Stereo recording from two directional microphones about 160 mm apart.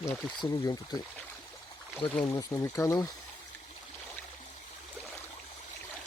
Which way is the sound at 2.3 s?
20° left (ahead or behind).